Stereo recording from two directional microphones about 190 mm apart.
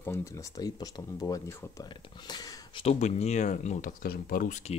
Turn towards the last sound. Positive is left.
turn(degrees=40)  # may be behind; listen again after turning